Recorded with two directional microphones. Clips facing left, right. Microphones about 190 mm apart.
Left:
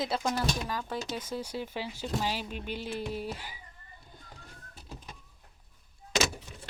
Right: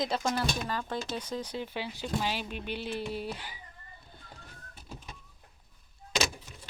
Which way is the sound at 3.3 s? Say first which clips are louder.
Even; 5° left (ahead or behind).